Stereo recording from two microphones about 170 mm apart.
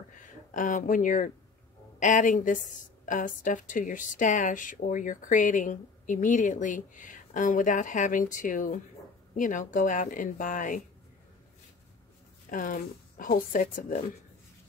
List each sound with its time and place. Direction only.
0.5 s speech: 50° left (ahead or behind)
12.4 s speech: 55° left (ahead or behind)